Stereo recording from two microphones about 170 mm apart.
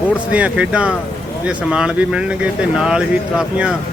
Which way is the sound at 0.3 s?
5° right (ahead or behind).